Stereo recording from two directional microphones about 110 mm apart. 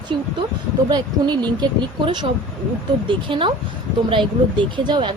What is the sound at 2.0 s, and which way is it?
Speech, 45° right (ahead or behind).